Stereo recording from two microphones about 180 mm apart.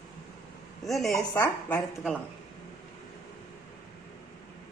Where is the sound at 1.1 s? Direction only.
15° left (ahead or behind).